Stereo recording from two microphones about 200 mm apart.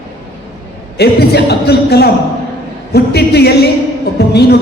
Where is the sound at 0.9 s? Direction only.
55° left (ahead or behind).